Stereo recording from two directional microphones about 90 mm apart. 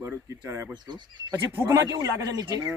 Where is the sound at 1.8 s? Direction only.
40° right (ahead or behind).